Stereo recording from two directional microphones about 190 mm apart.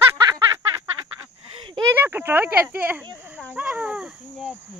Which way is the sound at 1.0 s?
20° right (ahead or behind).